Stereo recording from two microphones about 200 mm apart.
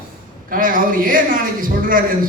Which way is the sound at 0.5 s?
45° right (ahead or behind).